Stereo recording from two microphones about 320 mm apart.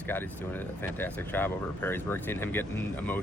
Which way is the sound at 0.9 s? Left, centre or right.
Centre.